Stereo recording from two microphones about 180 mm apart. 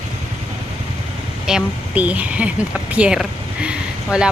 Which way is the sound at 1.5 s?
5° right (ahead or behind).